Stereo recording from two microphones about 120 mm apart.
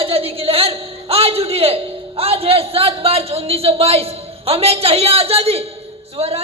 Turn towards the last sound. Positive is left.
turn(degrees=-55)  # may be behind; listen again after turning